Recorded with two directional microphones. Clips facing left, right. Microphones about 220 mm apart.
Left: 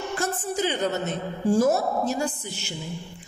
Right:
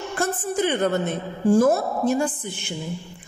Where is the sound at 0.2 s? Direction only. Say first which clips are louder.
Right 5 dB; 55° right (ahead or behind).